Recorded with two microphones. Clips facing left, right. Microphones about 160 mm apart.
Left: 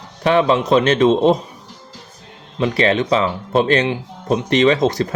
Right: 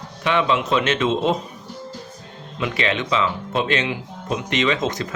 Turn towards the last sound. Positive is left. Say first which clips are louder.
# left 7 dB
turn(degrees=35)  # may be behind; listen again after turning